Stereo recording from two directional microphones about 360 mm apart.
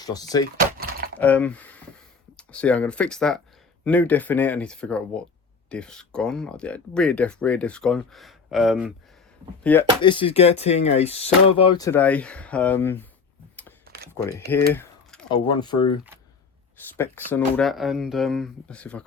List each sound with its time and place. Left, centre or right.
0.0 s speech: centre
9.6 s speech: centre
13.8 s a sound: right
14.7 s speech: centre
17.0 s speech: centre